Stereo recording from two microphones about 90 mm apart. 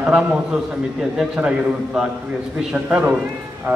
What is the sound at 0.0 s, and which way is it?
Speech, 10° right (ahead or behind).